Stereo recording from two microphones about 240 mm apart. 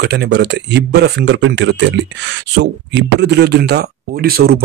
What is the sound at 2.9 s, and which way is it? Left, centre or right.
Speech, right.